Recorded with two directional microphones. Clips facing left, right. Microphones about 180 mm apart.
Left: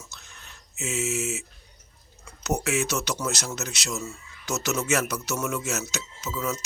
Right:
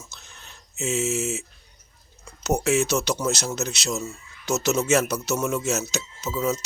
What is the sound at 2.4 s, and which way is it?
Speech, 25° right (ahead or behind).